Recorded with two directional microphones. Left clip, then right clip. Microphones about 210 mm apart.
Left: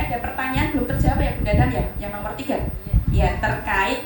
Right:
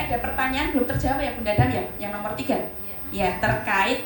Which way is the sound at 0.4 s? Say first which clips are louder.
Right 1 dB; 55° right (ahead or behind).